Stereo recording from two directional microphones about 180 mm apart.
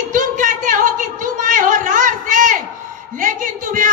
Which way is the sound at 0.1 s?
45° right (ahead or behind).